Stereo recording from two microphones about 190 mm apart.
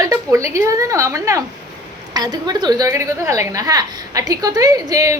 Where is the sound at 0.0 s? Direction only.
15° right (ahead or behind).